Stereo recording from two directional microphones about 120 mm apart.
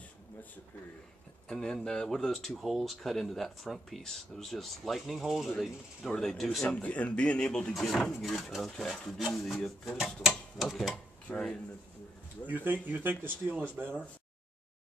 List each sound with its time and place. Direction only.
1.5 s speech: 5° left (ahead or behind)
12.4 s speech: 15° right (ahead or behind)